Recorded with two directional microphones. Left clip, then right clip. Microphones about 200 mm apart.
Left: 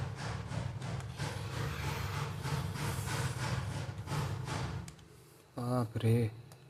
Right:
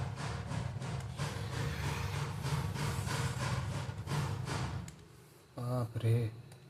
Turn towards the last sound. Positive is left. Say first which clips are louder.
# left 4 dB
turn(degrees=20)  # may be behind; listen again after turning